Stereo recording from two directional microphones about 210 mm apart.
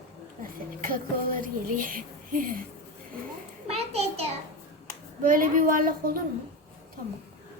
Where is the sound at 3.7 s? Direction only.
30° right (ahead or behind).